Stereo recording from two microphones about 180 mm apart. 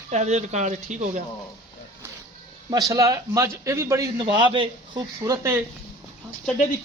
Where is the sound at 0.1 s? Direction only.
40° right (ahead or behind).